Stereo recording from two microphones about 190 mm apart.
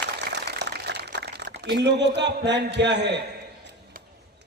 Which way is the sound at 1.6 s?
65° right (ahead or behind).